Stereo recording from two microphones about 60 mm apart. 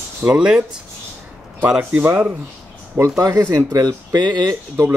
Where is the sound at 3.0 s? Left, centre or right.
Right.